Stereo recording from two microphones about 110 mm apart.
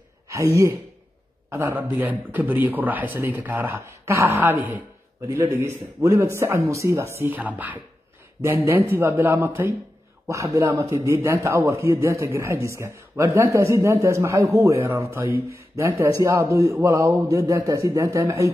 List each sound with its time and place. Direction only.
0.3 s a man's voice: 25° right (ahead or behind)